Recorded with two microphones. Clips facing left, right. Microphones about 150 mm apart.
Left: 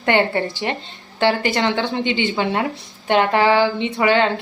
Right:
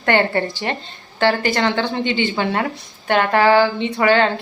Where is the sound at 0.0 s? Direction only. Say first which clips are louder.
Even; 20° left (ahead or behind).